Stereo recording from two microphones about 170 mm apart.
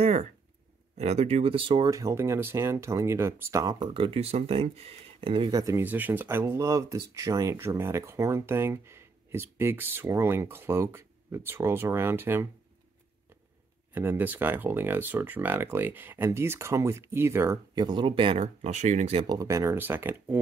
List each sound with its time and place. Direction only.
0.0 s a sound: 45° right (ahead or behind)
0.9 s speech: 40° right (ahead or behind); by 3.9 s 20° right (ahead or behind)
3.9 s speech: 35° right (ahead or behind); by 12.4 s 15° right (ahead or behind)
13.9 s speech: 10° right (ahead or behind); by 19.2 s 40° right (ahead or behind)
19.2 s speech: 20° right (ahead or behind)